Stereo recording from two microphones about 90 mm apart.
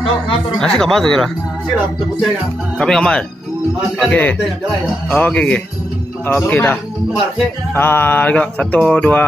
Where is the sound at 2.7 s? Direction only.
5° left (ahead or behind).